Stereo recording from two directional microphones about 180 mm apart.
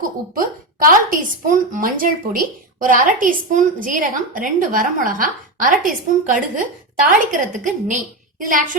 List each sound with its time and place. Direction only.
0.9 s speech: 50° right (ahead or behind)